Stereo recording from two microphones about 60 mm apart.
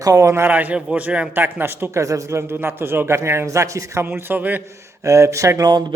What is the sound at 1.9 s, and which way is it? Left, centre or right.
Speech, right.